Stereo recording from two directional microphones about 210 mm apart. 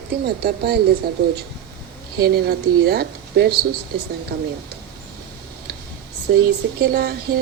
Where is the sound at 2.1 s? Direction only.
45° right (ahead or behind).